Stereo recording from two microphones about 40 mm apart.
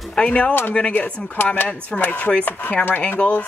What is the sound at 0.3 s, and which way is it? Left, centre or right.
Speech, left.